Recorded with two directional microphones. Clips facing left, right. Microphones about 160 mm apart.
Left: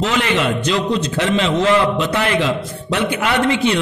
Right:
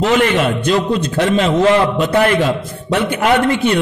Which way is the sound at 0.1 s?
50° right (ahead or behind).